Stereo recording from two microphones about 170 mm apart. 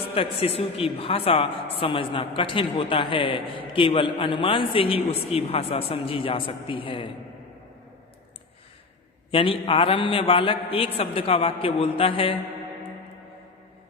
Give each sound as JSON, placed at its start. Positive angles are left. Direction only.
{"t": 0.1, "sound": "a woman's voice", "side_deg": 35}
{"t": 9.3, "sound": "a woman's voice", "side_deg": 30}